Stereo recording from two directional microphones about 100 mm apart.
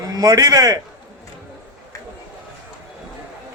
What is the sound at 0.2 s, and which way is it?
Speech, 35° right (ahead or behind).